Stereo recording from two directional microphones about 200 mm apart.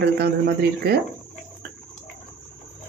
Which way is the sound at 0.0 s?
55° right (ahead or behind).